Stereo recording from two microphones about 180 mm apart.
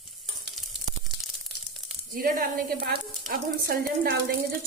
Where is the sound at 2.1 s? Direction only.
50° right (ahead or behind).